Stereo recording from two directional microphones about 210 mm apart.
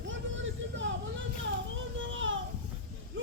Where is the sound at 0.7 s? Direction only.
60° right (ahead or behind).